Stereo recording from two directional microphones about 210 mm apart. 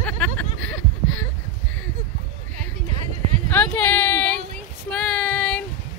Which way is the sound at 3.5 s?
5° left (ahead or behind).